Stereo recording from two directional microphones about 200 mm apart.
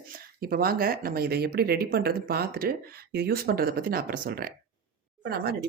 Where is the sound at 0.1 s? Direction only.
50° right (ahead or behind).